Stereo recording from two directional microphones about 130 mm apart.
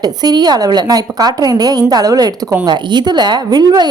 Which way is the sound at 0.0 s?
30° right (ahead or behind).